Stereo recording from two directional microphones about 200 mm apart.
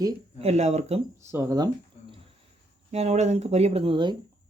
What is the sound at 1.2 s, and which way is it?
Speech, 15° right (ahead or behind).